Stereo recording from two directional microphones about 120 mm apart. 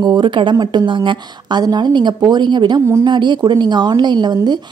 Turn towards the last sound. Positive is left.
turn(degrees=-35)  # may be behind; listen again after turning